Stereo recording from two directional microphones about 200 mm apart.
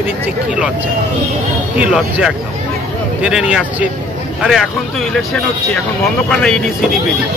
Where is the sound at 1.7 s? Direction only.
5° right (ahead or behind).